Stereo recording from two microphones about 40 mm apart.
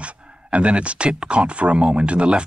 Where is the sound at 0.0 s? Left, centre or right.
Right.